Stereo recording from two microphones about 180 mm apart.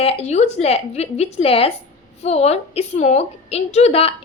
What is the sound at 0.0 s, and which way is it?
A woman's voice, 35° left (ahead or behind).